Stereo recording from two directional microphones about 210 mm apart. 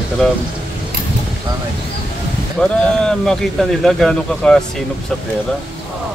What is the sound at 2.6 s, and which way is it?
Speech, 5° left (ahead or behind).